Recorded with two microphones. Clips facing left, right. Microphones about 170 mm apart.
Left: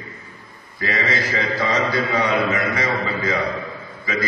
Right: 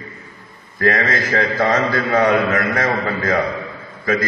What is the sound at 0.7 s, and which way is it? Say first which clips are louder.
A man's voice: right 5 dB; 50° right (ahead or behind).